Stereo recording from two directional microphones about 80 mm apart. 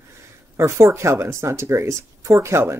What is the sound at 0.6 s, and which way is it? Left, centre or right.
Speech, right.